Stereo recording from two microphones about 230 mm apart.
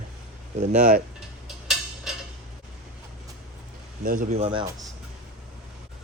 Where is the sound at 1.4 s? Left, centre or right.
Centre.